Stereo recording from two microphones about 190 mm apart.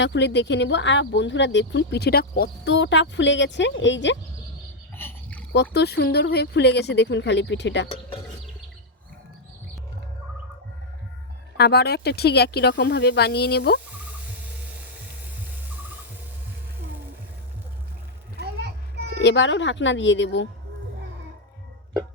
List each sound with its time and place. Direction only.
0.0 s speech: 70° left (ahead or behind)
4.9 s a sound: 10° left (ahead or behind)
5.5 s speech: 60° left (ahead or behind)
11.5 s speech: 60° left (ahead or behind)
18.3 s children playing: 60° right (ahead or behind)
19.2 s speech: 75° left (ahead or behind)